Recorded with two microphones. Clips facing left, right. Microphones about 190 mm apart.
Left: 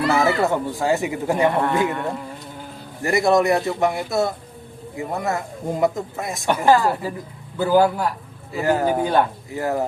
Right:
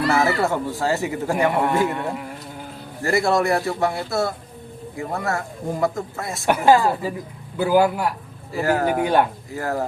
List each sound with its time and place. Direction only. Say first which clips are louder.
0.1 s speech: left 2 dB; 15° left (ahead or behind)
1.9 s speech: left 1 dB; 15° right (ahead or behind)
3.0 s speech: left 2 dB; 20° left (ahead or behind)
6.4 s speech: right 1 dB; 15° right (ahead or behind)
8.5 s speech: left 1 dB; 20° left (ahead or behind)
9.0 s speech: right 1 dB; 10° right (ahead or behind)
9.6 s speech: left 2 dB; 20° left (ahead or behind)